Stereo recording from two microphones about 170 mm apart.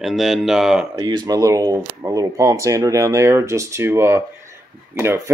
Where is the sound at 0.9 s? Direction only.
25° right (ahead or behind).